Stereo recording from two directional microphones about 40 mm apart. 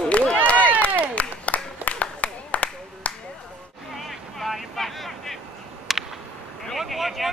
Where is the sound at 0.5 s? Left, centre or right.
Left.